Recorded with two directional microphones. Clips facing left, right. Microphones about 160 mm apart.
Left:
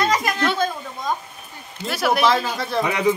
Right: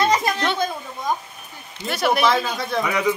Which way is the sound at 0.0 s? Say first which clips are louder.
Right 1 dB; 25° right (ahead or behind).